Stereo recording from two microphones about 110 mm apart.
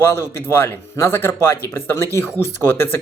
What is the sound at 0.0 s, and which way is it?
A man's voice, 25° left (ahead or behind).